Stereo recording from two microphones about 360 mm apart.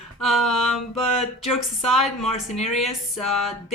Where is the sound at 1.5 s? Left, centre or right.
Centre.